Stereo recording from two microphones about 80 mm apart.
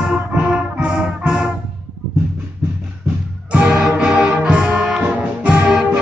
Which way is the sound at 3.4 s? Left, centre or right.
Centre.